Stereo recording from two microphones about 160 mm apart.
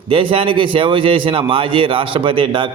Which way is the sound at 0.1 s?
35° right (ahead or behind).